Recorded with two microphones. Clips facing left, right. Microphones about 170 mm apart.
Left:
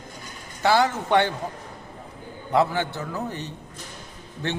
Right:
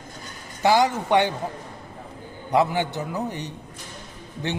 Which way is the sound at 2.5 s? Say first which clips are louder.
Right 1 dB; 15° right (ahead or behind).